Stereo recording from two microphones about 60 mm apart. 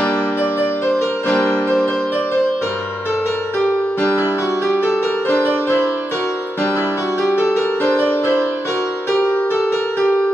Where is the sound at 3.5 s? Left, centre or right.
Centre.